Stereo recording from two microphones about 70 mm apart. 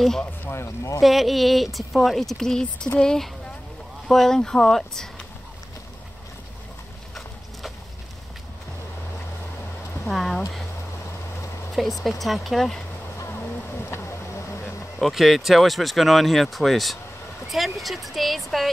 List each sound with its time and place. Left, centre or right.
0.4 s a sound: left
1.0 s speech: centre
10.0 s speech: centre
11.7 s speech: centre
15.0 s speech: centre